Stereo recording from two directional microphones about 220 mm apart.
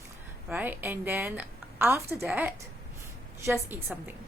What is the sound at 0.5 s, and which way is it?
A woman's voice, 10° right (ahead or behind).